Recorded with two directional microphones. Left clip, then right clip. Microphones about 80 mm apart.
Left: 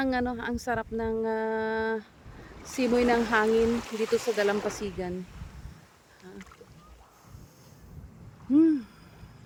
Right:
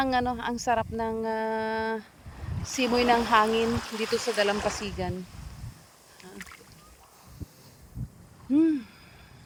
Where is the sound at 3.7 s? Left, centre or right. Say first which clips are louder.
Left 1 dB; right.